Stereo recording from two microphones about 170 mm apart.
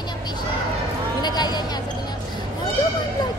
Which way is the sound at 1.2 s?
25° left (ahead or behind).